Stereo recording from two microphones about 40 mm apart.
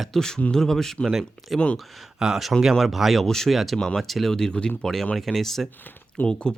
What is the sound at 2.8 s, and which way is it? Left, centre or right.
Speech, centre.